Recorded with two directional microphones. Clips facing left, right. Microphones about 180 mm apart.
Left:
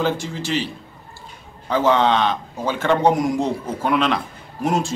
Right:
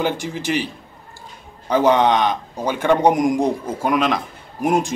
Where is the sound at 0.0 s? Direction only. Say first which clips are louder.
Even; 15° right (ahead or behind).